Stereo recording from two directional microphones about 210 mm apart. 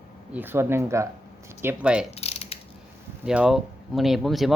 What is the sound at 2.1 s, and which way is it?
Mechanisms, 30° left (ahead or behind).